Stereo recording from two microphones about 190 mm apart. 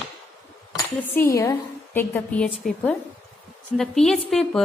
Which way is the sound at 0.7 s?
15° left (ahead or behind).